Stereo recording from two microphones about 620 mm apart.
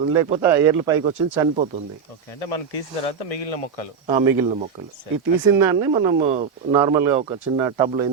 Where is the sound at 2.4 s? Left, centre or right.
Left.